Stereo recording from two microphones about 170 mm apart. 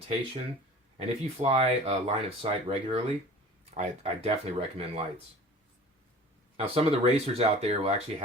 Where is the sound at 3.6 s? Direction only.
45° right (ahead or behind).